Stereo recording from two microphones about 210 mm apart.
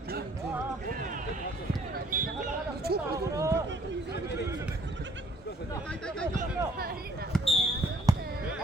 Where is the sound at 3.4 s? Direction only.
15° right (ahead or behind).